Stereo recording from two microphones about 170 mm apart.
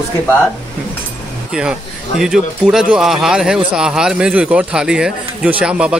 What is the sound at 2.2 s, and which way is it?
Speech, 5° right (ahead or behind).